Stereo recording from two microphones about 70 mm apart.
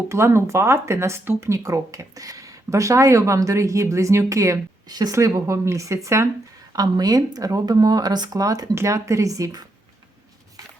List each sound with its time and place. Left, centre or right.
0.1 s speech: right
4.9 s speech: right
5.1 s speech: right
6.7 s speech: right
8.7 s speech: right
10.6 s a sound: right